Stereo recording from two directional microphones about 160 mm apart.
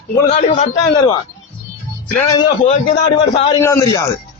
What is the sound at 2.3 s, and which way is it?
Speech, 25° left (ahead or behind).